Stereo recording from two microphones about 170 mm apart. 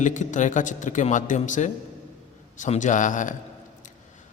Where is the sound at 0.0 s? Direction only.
45° left (ahead or behind).